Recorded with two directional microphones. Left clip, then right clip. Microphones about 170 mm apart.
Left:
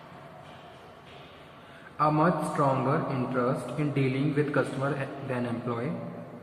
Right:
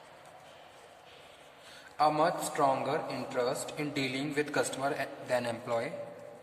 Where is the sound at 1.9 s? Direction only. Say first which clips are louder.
Left 2 dB; 50° right (ahead or behind).